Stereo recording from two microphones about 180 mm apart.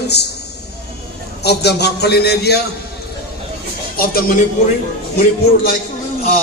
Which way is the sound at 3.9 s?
55° left (ahead or behind).